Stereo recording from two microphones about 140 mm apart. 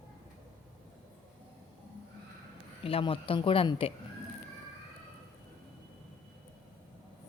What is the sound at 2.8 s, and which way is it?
Speech, 40° left (ahead or behind).